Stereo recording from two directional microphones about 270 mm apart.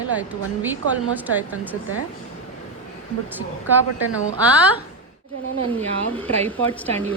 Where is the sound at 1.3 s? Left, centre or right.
Centre.